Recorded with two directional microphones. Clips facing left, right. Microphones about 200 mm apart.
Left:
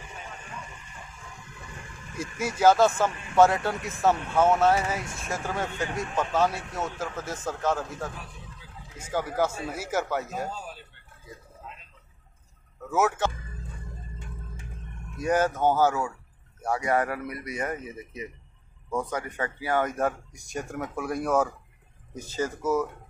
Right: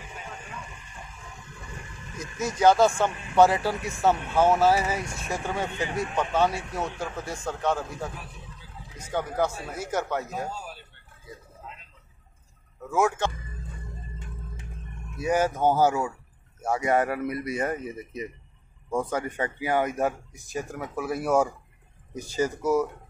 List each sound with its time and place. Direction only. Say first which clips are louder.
2.1 s speech: right 1 dB; 10° left (ahead or behind)
12.9 s speech: right 1 dB; 5° left (ahead or behind)
15.1 s speech: even; 10° right (ahead or behind)